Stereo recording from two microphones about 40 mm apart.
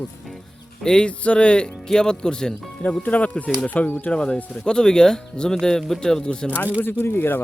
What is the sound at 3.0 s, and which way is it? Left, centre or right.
Speech, left.